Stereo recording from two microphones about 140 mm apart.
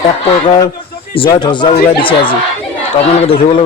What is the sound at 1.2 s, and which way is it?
A man's voice, 35° left (ahead or behind).